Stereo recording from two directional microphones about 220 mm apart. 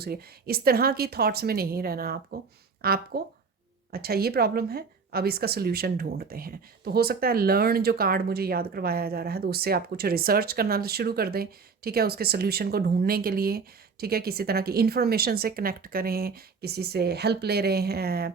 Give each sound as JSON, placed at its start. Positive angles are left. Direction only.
{"t": 0.0, "sound": "a woman's voice", "side_deg": -45}